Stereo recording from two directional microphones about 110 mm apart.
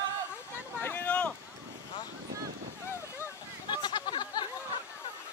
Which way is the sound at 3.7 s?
40° left (ahead or behind).